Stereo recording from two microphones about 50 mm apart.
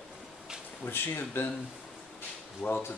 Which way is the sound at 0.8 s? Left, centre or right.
Left.